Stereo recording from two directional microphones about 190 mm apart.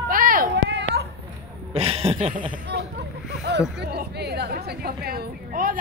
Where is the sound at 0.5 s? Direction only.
65° right (ahead or behind).